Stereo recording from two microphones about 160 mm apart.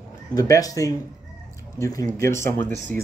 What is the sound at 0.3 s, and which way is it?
Speech, 20° left (ahead or behind).